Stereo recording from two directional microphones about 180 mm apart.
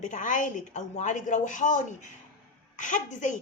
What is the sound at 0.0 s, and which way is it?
A woman's voice, 45° left (ahead or behind).